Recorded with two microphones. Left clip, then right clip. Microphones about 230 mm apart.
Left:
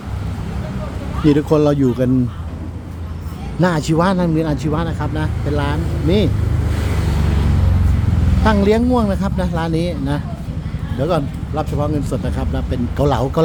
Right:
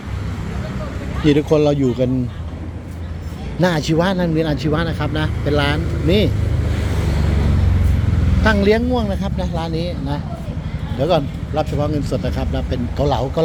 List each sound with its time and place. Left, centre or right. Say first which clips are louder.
1.3 s speech: even; centre
3.6 s speech: left 1 dB; centre
8.4 s speech: even; centre
8.9 s speech: left 3 dB; centre
11.0 s speech: right 2 dB; centre
13.0 s speech: left 2 dB; left